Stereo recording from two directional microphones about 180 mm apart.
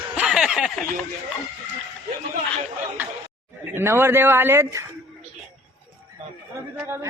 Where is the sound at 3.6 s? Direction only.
10° right (ahead or behind).